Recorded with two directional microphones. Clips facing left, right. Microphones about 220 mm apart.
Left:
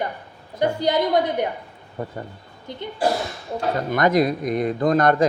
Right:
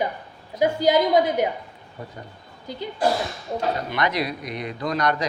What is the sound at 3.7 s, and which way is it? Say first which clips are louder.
A man's voice: left 6 dB; 45° left (ahead or behind).